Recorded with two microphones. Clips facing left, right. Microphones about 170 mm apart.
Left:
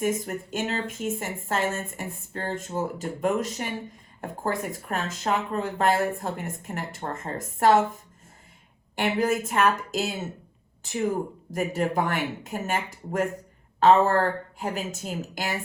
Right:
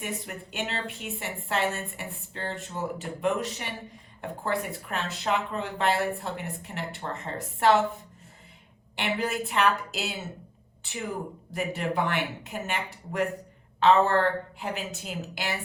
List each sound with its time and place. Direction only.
0.2 s speech: 40° left (ahead or behind)